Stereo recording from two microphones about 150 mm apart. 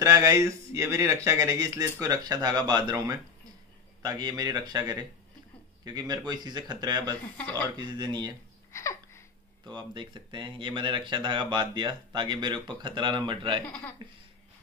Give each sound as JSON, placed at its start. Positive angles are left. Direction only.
{"t": 0.0, "sound": "speech", "side_deg": -25}
{"t": 8.7, "sound": "a sound", "side_deg": 20}
{"t": 9.7, "sound": "speech", "side_deg": -30}
{"t": 13.7, "sound": "speech", "side_deg": 10}